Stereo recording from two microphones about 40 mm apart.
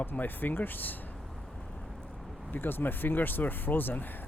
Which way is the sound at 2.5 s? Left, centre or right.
Left.